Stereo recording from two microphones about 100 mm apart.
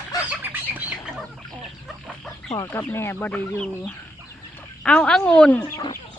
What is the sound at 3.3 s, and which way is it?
Speech, 10° left (ahead or behind).